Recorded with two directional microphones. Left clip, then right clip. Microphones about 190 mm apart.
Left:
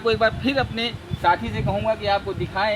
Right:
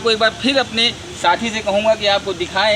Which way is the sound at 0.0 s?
5° left (ahead or behind).